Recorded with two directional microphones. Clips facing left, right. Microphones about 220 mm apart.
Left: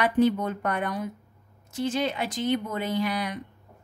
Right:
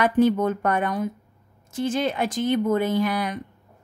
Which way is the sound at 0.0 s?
45° right (ahead or behind).